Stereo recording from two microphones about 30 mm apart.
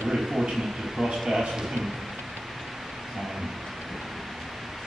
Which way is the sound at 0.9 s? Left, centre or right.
Centre.